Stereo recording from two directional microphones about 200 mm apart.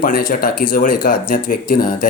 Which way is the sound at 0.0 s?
45° left (ahead or behind).